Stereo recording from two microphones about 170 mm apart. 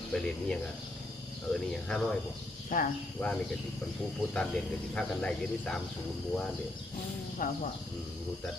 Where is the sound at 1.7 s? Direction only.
5° left (ahead or behind).